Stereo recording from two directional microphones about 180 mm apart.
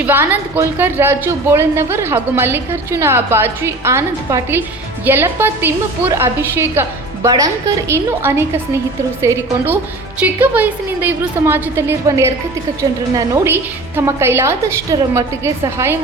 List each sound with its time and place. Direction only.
0.0 s speech: 10° right (ahead or behind)